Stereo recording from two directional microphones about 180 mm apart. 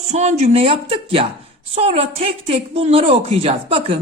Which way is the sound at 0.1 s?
40° right (ahead or behind).